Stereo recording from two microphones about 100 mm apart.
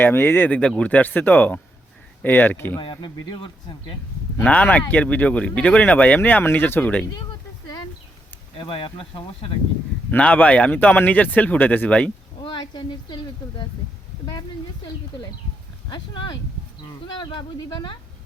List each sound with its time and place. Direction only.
0.0 s speech: 20° left (ahead or behind)
2.7 s speech: 50° left (ahead or behind)
4.4 s speech: 15° left (ahead or behind)
7.1 s a sound: 45° left (ahead or behind)
8.5 s speech: 60° left (ahead or behind)
10.1 s speech: 15° left (ahead or behind)
12.4 s speech: 50° left (ahead or behind)
15.9 s speech: 55° left (ahead or behind)
16.8 s speech: 45° left (ahead or behind)